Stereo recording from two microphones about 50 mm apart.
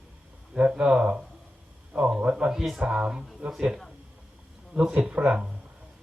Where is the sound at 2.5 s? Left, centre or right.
Centre.